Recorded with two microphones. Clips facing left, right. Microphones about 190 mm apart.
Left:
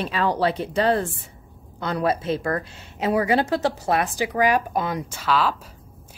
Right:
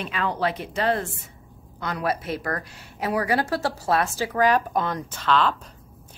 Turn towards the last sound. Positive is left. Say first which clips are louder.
# even
turn(degrees=5)  # may be behind; listen again after turning